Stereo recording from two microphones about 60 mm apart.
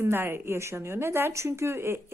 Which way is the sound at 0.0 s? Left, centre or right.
Right.